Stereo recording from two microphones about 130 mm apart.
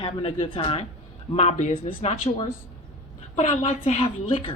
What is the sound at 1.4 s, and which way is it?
Speech, 60° left (ahead or behind).